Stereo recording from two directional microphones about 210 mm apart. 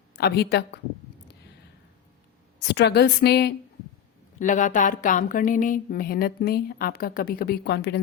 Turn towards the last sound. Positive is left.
turn(degrees=50)  # may be behind; listen again after turning